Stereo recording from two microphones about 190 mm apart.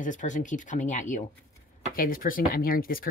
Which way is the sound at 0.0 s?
40° left (ahead or behind).